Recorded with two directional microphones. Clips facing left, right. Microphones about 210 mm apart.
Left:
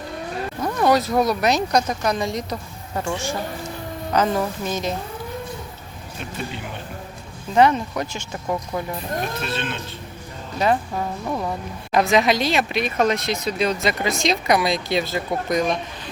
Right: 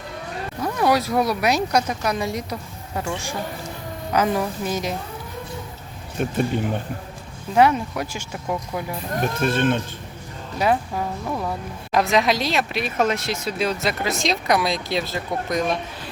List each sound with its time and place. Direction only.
0.6 s speech: 5° right (ahead or behind)
6.2 s speech: 45° right (ahead or behind)
7.5 s speech: 10° right (ahead or behind)
9.4 s speech: 50° right (ahead or behind)
10.6 s speech: 10° right (ahead or behind)
11.3 s speech: centre (ahead or behind)